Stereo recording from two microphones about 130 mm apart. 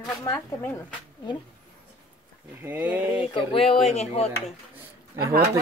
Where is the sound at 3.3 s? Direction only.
45° left (ahead or behind).